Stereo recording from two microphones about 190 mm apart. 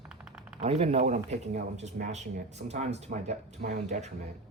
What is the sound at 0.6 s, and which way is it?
Speech, 35° right (ahead or behind).